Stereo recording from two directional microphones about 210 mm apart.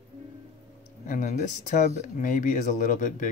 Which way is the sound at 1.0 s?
35° left (ahead or behind).